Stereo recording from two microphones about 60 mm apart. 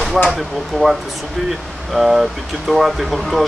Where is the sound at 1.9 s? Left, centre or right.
Centre.